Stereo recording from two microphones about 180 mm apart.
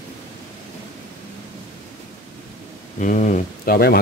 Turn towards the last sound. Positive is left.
turn(degrees=60)  # may be behind; listen again after turning